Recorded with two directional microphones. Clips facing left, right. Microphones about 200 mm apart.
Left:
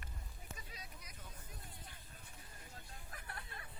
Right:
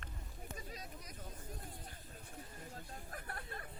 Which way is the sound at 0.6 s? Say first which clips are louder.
Right 6 dB; 45° right (ahead or behind).